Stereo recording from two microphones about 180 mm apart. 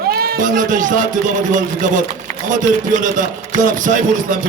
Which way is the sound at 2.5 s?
45° right (ahead or behind).